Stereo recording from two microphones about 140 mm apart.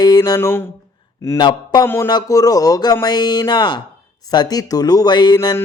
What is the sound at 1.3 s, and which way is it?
Speech, 30° left (ahead or behind).